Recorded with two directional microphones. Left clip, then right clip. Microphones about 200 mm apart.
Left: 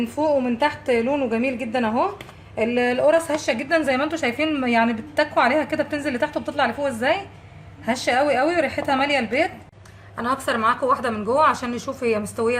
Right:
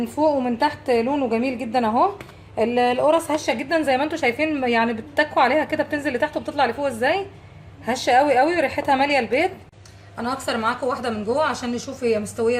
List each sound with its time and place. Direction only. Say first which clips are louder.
0.2 s a woman's voice: right 1 dB; 5° right (ahead or behind)
10.2 s a woman's voice: left 2 dB; 40° left (ahead or behind)